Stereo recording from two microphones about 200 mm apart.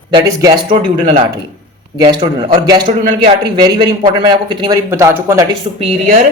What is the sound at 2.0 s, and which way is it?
A man's voice, 25° right (ahead or behind).